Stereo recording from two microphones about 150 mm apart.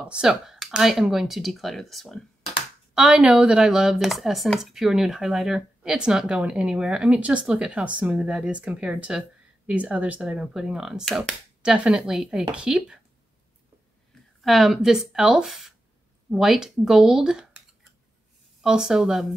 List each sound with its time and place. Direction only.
0.0 s speech: 5° right (ahead or behind)
14.4 s speech: centre (ahead or behind)